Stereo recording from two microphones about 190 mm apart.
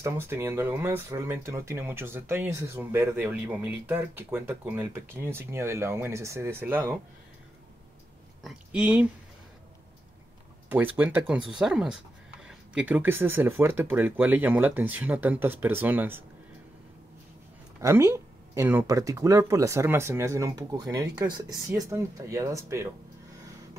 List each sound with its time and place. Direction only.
0.0 s speech: 15° right (ahead or behind)
8.5 s speech: 5° right (ahead or behind)
10.7 s speech: 10° right (ahead or behind)
17.7 s speech: 15° right (ahead or behind)